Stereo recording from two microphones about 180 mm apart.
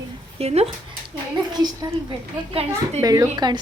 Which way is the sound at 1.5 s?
20° right (ahead or behind).